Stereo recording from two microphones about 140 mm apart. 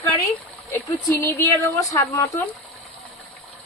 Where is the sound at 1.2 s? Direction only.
20° left (ahead or behind).